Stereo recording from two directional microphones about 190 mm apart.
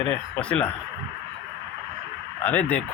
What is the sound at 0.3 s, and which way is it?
Speech, 5° left (ahead or behind).